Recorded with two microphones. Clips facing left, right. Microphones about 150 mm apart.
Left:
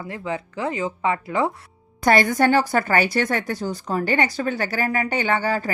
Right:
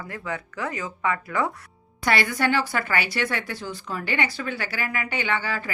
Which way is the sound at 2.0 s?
45° left (ahead or behind).